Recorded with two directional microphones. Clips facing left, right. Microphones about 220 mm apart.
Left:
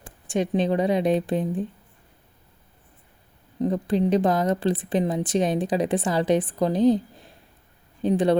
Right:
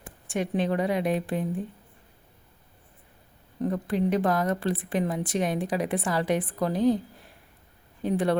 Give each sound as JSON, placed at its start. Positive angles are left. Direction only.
{"t": 0.3, "sound": "a woman's voice", "side_deg": 20}
{"t": 3.6, "sound": "a woman's voice", "side_deg": 20}